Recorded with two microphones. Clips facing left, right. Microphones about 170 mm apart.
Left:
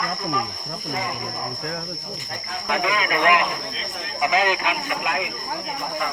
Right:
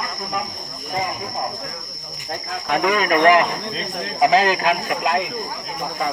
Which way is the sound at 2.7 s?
50° right (ahead or behind).